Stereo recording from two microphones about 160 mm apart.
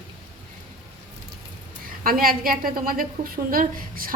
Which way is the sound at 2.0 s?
65° right (ahead or behind).